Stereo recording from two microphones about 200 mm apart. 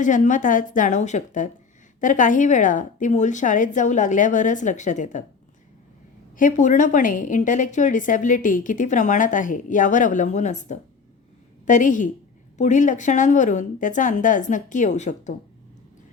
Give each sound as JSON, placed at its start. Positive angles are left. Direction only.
{"t": 0.0, "sound": "a woman's voice", "side_deg": 40}
{"t": 6.3, "sound": "a woman's voice", "side_deg": 40}